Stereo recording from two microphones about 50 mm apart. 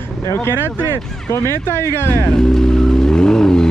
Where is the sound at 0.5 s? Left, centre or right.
Right.